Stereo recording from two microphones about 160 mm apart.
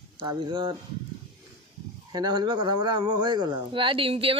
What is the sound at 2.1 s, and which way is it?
Speech, 25° right (ahead or behind).